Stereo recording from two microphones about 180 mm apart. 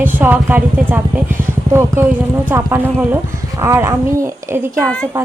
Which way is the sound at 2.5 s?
10° right (ahead or behind).